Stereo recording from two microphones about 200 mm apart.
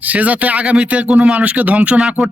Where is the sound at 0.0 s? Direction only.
5° right (ahead or behind).